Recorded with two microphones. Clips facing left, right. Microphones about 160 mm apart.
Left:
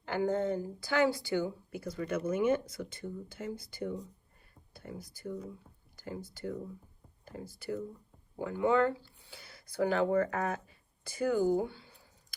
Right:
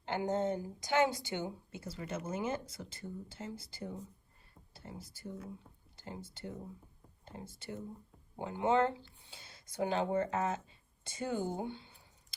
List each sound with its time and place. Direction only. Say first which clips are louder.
0.0 s speech: left 3 dB; 20° right (ahead or behind)